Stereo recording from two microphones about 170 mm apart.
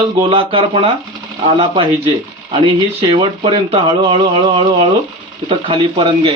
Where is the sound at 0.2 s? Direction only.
30° right (ahead or behind).